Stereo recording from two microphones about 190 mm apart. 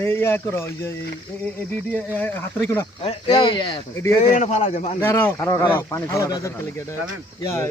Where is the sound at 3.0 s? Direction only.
25° left (ahead or behind).